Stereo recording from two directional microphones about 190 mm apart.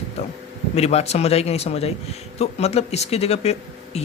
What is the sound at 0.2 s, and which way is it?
Speech, 30° left (ahead or behind).